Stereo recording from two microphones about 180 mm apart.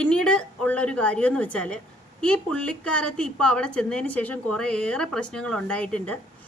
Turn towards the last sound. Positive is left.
turn(degrees=5)  # may be behind; listen again after turning